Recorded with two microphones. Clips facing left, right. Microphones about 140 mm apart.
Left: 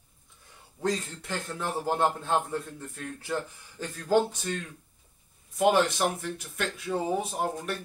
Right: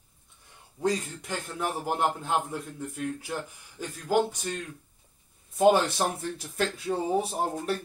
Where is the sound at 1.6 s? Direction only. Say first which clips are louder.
Left 1 dB; 15° right (ahead or behind).